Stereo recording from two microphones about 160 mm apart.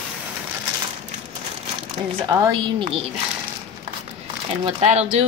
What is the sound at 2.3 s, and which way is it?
Speech, 25° right (ahead or behind).